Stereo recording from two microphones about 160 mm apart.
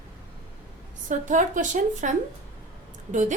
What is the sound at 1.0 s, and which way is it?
A woman's voice, 55° right (ahead or behind).